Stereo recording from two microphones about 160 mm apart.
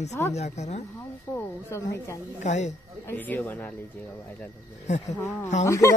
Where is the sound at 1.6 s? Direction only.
20° left (ahead or behind).